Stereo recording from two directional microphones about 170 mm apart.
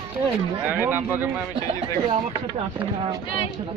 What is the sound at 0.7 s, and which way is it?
Speech, 10° right (ahead or behind).